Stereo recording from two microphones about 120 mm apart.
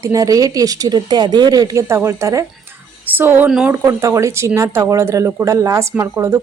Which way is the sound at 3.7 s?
25° right (ahead or behind).